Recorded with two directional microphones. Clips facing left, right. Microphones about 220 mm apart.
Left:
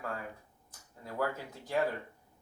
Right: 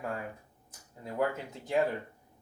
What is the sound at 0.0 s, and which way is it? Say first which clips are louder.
Speech: right 3 dB; 20° right (ahead or behind).